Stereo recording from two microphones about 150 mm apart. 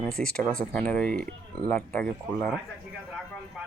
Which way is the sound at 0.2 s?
5° left (ahead or behind).